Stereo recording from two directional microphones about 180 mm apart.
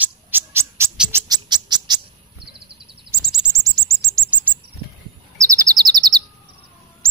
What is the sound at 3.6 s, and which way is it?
Bird flight, 15° right (ahead or behind).